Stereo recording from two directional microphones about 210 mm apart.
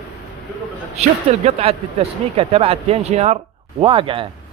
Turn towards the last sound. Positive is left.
turn(degrees=-25)  # may be behind; listen again after turning